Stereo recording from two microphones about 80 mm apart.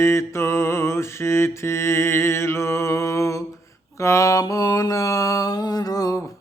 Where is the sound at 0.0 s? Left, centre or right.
Left.